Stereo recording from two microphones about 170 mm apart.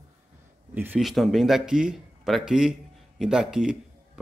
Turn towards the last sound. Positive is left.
turn(degrees=-5)  # may be behind; listen again after turning